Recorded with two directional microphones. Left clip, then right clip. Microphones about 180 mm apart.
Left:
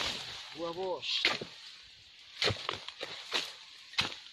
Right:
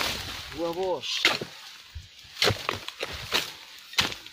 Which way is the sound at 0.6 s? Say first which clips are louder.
Right 8 dB; 60° right (ahead or behind).